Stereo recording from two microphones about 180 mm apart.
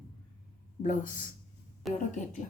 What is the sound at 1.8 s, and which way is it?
Speech, centre (ahead or behind).